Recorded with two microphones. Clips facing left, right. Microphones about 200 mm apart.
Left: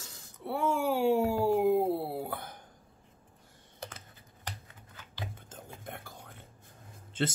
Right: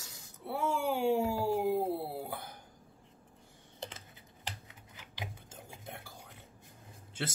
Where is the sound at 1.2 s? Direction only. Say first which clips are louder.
Left 5 dB; 55° left (ahead or behind).